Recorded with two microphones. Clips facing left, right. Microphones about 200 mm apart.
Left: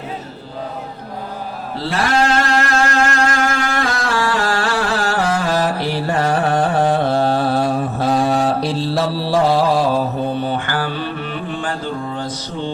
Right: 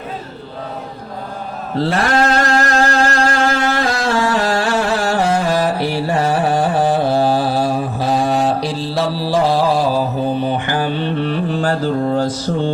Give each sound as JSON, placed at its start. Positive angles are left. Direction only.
{"t": 1.8, "sound": "mantra", "side_deg": -35}
{"t": 5.5, "sound": "carnatic music", "side_deg": -15}
{"t": 10.7, "sound": "mantra", "side_deg": -20}
{"t": 11.2, "sound": "mantra", "side_deg": -35}